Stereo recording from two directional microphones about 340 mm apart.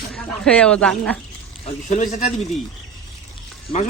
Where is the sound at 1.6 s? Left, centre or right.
Left.